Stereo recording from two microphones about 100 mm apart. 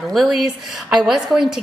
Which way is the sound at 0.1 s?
Centre (ahead or behind).